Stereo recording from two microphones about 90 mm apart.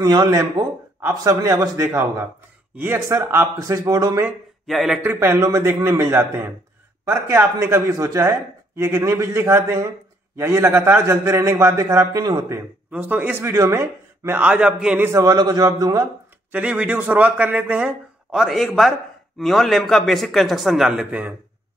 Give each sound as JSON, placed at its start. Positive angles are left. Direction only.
{"t": 0.0, "sound": "speech", "side_deg": -50}
{"t": 1.0, "sound": "a man's voice", "side_deg": -30}
{"t": 3.5, "sound": "speech", "side_deg": -40}
{"t": 4.6, "sound": "a man's voice", "side_deg": 0}
{"t": 5.1, "sound": "a man's voice", "side_deg": -30}
{"t": 12.9, "sound": "a man's voice", "side_deg": -20}
{"t": 14.4, "sound": "a man's voice", "side_deg": -15}
{"t": 15.0, "sound": "a man's voice", "side_deg": -30}
{"t": 15.2, "sound": "a man's voice", "side_deg": -45}
{"t": 16.5, "sound": "a man's voice", "side_deg": -20}
{"t": 18.3, "sound": "a man's voice", "side_deg": 0}